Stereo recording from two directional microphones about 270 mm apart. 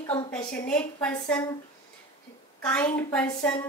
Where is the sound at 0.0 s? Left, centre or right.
Centre.